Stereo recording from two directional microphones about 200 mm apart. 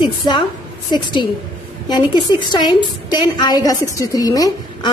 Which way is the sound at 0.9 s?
25° left (ahead or behind).